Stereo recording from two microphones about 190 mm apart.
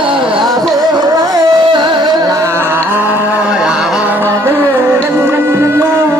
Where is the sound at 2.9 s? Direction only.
10° right (ahead or behind).